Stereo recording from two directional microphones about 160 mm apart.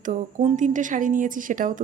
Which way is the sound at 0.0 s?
50° right (ahead or behind).